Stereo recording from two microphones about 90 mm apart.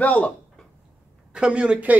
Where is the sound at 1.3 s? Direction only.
10° right (ahead or behind).